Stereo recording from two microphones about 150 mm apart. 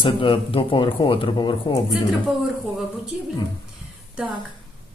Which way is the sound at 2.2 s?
5° right (ahead or behind).